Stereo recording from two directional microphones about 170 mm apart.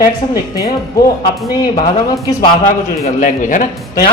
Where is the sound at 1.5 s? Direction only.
20° left (ahead or behind).